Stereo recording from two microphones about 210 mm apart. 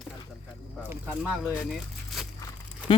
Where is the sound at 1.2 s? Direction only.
Centre (ahead or behind).